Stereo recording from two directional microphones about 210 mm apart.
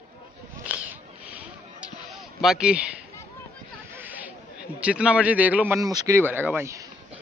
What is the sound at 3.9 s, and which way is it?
A man's voice, 10° right (ahead or behind).